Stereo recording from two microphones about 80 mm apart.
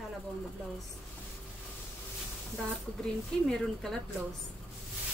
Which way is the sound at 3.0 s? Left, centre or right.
Centre.